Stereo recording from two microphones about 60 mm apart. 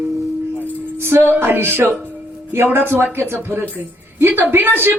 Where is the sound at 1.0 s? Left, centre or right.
Right.